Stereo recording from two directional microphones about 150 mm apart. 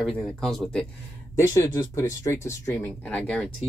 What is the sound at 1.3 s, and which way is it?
Speech, 20° left (ahead or behind).